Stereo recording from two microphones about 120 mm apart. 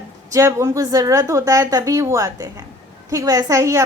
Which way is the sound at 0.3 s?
25° right (ahead or behind).